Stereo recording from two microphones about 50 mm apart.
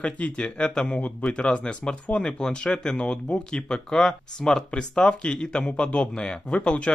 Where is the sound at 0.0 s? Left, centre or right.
Left.